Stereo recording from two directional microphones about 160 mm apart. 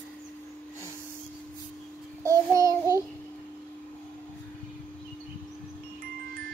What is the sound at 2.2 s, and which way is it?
Child singing, 20° right (ahead or behind).